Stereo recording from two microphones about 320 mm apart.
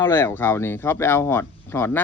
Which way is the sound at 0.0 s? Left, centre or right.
Centre.